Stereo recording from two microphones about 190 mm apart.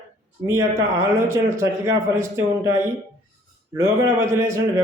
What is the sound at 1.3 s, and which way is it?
Speech, 15° right (ahead or behind).